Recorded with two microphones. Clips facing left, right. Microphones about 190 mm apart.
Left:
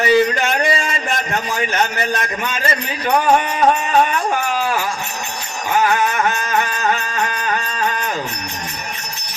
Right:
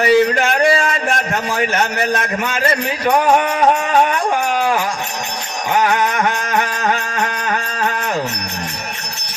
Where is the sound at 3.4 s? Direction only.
65° right (ahead or behind).